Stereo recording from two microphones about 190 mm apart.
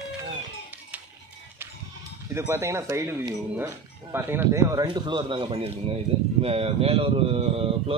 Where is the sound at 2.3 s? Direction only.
15° right (ahead or behind).